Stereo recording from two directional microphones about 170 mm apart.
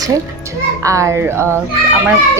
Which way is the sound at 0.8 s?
20° right (ahead or behind).